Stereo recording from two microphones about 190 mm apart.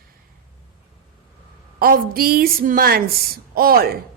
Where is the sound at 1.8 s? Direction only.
50° right (ahead or behind).